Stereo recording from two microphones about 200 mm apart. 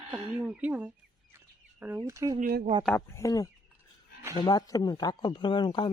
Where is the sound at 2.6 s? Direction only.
25° right (ahead or behind).